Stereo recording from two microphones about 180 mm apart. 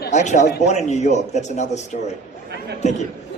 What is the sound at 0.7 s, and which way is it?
A man's voice, 40° left (ahead or behind).